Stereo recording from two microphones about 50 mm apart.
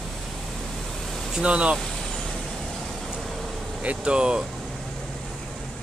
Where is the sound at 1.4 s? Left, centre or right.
Right.